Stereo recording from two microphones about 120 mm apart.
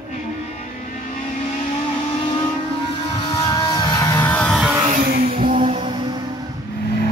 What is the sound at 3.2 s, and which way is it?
Music, 40° left (ahead or behind).